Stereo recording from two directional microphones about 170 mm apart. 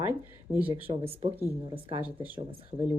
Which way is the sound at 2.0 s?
10° right (ahead or behind).